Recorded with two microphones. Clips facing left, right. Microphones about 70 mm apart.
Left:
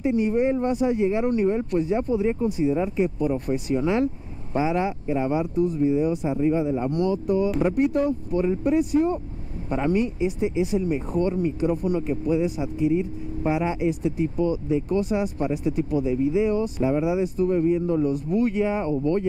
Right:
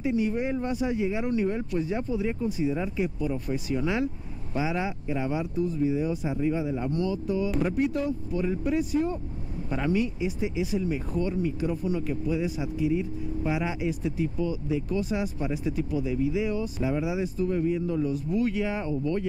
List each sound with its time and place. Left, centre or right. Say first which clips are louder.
0.0 s speech: left 5 dB; left
6.9 s speech: left 5 dB; left
17.5 s speech: left 6 dB; left
17.8 s speech: left 5 dB; left